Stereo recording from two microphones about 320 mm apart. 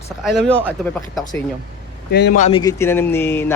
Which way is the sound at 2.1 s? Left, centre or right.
Left.